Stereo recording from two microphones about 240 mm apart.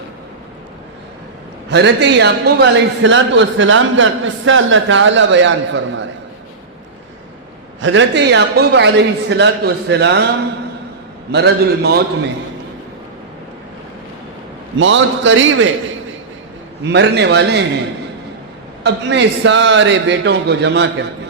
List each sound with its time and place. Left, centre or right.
1.7 s a man's voice: right
7.8 s a man's voice: right
11.3 s a man's voice: right
14.8 s a man's voice: right
16.9 s a man's voice: right
18.8 s a man's voice: right